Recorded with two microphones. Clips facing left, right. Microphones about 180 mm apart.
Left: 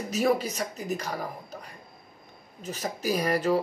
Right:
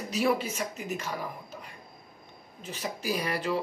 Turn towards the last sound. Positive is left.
turn(degrees=40)  # may be behind; listen again after turning